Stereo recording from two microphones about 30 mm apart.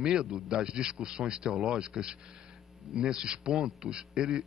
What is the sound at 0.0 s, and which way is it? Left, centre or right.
A man's voice, right.